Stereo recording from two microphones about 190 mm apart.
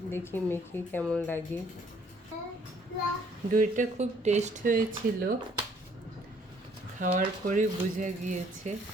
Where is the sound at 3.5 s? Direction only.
40° right (ahead or behind).